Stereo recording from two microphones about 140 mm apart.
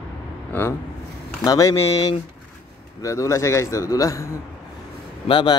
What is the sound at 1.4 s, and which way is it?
Speech, 25° left (ahead or behind).